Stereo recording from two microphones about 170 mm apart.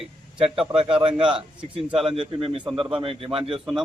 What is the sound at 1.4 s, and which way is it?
A man's voice, 30° right (ahead or behind).